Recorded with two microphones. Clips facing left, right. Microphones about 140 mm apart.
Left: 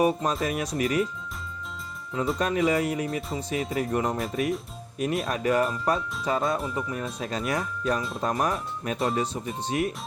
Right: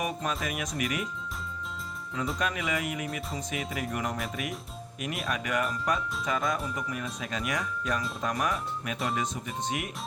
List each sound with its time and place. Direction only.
0.0 s speech: 30° left (ahead or behind)
2.4 s speech: 35° left (ahead or behind)